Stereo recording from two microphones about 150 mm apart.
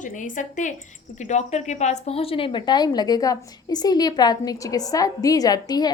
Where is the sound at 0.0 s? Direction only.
60° left (ahead or behind).